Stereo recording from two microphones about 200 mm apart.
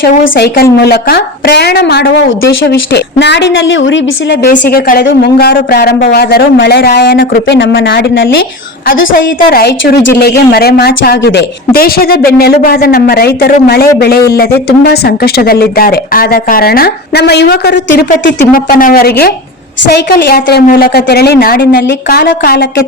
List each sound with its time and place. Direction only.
0.0 s a woman's voice: 50° left (ahead or behind); by 4.4 s 65° left (ahead or behind)
4.4 s a woman's voice: 45° left (ahead or behind); by 8.4 s 65° left (ahead or behind)
9.1 s a woman's voice: 45° left (ahead or behind)
14.8 s a woman's voice: 50° left (ahead or behind)